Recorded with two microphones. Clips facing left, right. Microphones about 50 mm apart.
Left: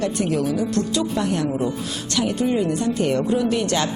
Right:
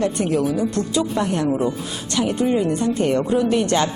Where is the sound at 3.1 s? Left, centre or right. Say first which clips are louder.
Right 2 dB; centre.